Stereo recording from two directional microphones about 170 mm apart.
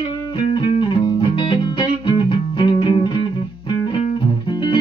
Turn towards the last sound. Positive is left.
turn(degrees=25)  # may be behind; listen again after turning